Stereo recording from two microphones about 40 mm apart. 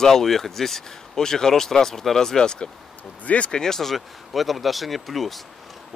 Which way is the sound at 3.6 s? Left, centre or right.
Centre.